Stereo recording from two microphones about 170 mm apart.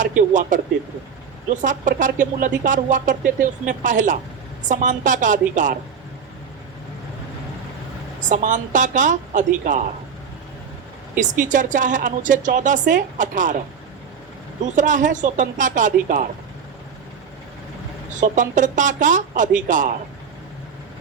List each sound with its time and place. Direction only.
0.2 s speech: 50° right (ahead or behind)
1.6 s speech: 50° right (ahead or behind)
8.2 s speech: 50° right (ahead or behind)
11.2 s speech: 50° right (ahead or behind)
14.6 s speech: 50° right (ahead or behind)
18.1 s speech: 50° right (ahead or behind)